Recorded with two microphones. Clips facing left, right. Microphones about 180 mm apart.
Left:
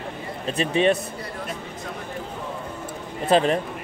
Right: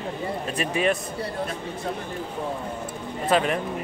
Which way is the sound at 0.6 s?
25° left (ahead or behind).